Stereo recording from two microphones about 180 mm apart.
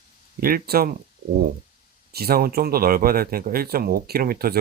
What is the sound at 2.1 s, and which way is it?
Speech, 60° right (ahead or behind).